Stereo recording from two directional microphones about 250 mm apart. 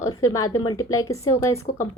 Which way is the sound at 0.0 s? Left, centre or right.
Centre.